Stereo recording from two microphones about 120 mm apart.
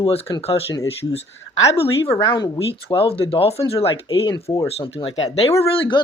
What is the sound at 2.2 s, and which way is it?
Speech, 40° left (ahead or behind).